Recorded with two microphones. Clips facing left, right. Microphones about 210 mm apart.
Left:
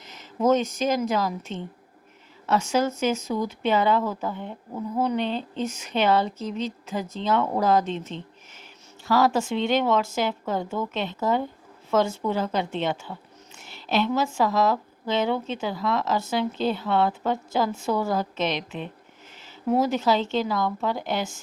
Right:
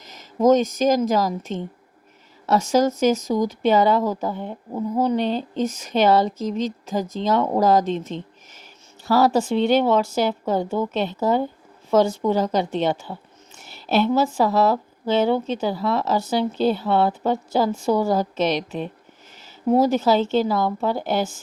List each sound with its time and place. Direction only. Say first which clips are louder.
0.0 s a sound: right 5 dB; 40° right (ahead or behind)
0.8 s speech: right 5 dB; 40° right (ahead or behind)
2.7 s speech: right 7 dB; 40° right (ahead or behind)
9.0 s speech: right 4 dB; 35° right (ahead or behind)